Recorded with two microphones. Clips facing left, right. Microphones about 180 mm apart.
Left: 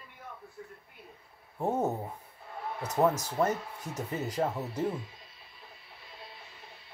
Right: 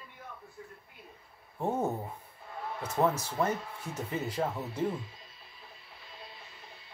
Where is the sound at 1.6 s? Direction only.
25° left (ahead or behind).